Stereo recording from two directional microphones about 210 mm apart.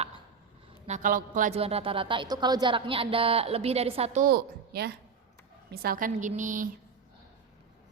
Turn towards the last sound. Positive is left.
turn(degrees=-35)  # may be behind; listen again after turning